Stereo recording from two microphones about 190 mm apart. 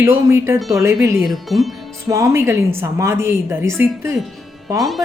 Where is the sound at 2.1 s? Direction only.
15° right (ahead or behind).